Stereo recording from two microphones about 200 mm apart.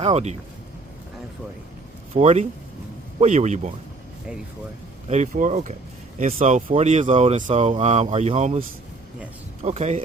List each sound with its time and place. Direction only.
0.0 s speech: 30° right (ahead or behind)
2.1 s speech: 30° right (ahead or behind)
5.0 s speech: 35° right (ahead or behind)
9.6 s speech: 35° right (ahead or behind)